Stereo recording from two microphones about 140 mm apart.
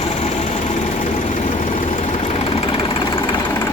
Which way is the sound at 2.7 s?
40° left (ahead or behind).